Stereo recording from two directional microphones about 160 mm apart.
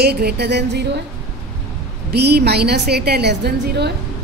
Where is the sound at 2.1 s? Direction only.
90° right.